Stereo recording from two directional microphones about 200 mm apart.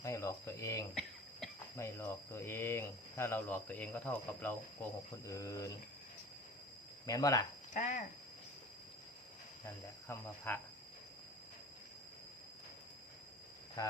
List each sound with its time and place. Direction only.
0.0 s a sound: 15° left (ahead or behind)
1.8 s speech: 15° left (ahead or behind)
7.1 s speech: 15° left (ahead or behind)
7.7 s speech: 40° left (ahead or behind)
9.6 s speech: 10° left (ahead or behind)
13.8 s speech: 15° left (ahead or behind)